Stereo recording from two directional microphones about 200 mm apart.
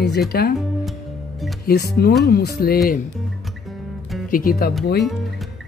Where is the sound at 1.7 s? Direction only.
55° left (ahead or behind).